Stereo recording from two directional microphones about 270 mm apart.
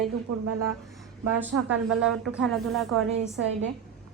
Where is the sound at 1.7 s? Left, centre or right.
Centre.